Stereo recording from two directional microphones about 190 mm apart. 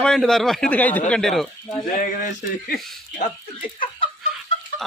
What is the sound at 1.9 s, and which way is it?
Speech, 50° left (ahead or behind).